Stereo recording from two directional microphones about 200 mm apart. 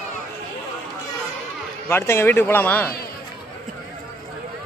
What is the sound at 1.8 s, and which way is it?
Speech, 10° left (ahead or behind).